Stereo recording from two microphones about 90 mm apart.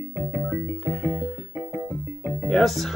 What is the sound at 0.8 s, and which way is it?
Music, 25° left (ahead or behind).